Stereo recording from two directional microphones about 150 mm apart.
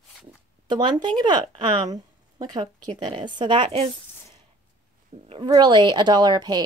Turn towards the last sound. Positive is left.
turn(degrees=-25)  # may be behind; listen again after turning